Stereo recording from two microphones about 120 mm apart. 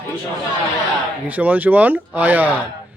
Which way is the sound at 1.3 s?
15° right (ahead or behind).